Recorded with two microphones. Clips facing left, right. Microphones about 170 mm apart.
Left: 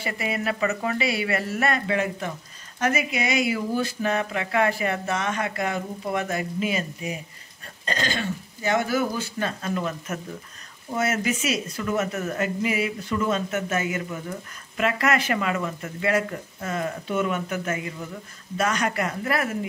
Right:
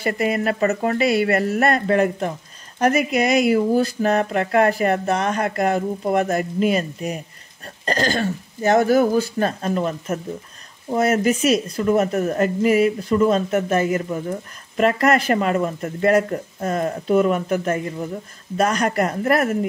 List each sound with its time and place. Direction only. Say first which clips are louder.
0.0 s speech: right 7 dB; 45° right (ahead or behind)